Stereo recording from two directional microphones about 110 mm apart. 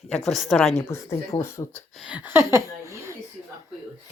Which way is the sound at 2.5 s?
25° right (ahead or behind).